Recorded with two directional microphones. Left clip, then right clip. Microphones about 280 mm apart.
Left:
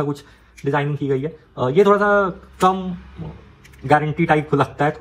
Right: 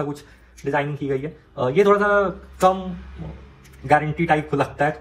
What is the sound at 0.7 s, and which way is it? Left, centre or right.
Speech, left.